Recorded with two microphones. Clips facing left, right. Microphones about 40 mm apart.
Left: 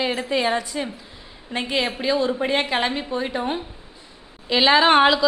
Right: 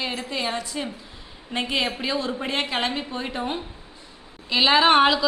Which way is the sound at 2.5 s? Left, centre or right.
Centre.